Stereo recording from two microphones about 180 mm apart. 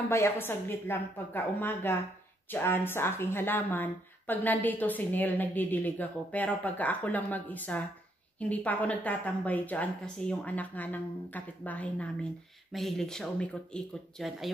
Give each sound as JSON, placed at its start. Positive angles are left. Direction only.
{"t": 0.1, "sound": "a woman's voice", "side_deg": 15}